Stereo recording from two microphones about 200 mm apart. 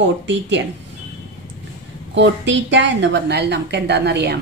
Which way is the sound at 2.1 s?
60° right (ahead or behind).